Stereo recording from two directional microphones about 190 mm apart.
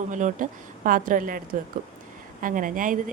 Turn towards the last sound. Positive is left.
turn(degrees=-45)  # may be behind; listen again after turning